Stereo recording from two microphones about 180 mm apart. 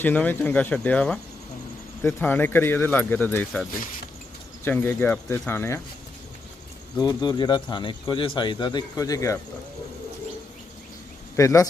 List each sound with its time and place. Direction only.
0.0 s speech: 10° left (ahead or behind)
7.0 s speech: 20° left (ahead or behind)
11.3 s speech: 15° left (ahead or behind)